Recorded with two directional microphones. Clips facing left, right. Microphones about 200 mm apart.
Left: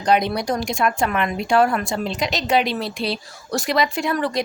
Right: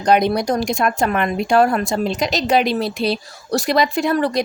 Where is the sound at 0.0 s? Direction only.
45° right (ahead or behind).